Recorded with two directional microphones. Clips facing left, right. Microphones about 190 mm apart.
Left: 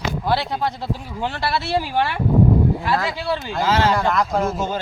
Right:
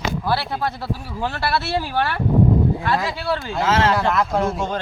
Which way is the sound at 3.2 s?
15° left (ahead or behind).